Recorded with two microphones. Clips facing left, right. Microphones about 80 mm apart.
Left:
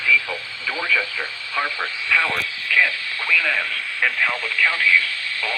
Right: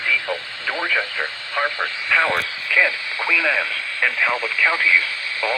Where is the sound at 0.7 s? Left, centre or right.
Right.